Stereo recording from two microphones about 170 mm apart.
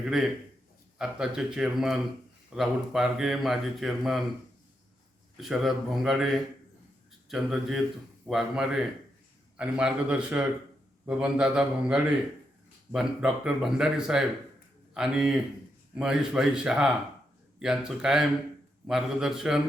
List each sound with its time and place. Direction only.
0.0 s speech: centre (ahead or behind)
5.4 s a man's voice: centre (ahead or behind)